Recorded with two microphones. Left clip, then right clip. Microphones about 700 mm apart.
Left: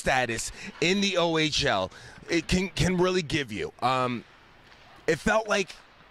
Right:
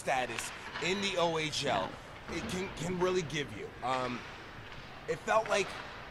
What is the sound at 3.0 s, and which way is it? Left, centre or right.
Speech, left.